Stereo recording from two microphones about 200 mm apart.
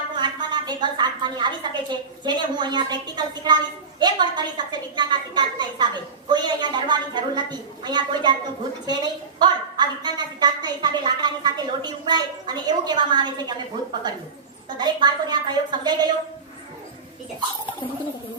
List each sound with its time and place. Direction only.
0.2 s a woman's voice: 20° right (ahead or behind)
14.8 s a woman's voice: 20° right (ahead or behind)